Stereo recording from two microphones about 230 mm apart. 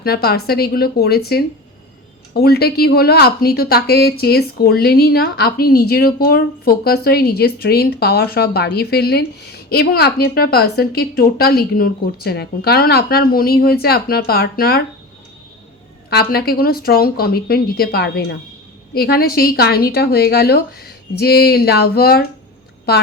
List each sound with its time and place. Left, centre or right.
0.0 s a woman's voice: left
16.0 s a woman's voice: left